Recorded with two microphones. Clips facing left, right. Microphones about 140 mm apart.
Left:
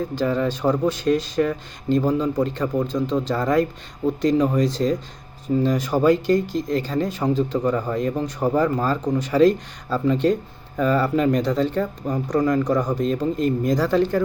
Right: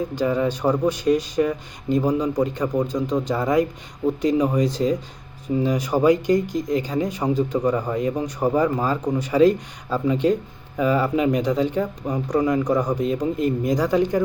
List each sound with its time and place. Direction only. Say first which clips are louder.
0.0 s speech: even; 10° right (ahead or behind)